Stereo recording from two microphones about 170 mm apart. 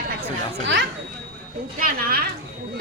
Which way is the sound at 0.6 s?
90° right.